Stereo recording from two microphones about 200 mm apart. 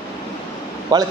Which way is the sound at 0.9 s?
20° right (ahead or behind).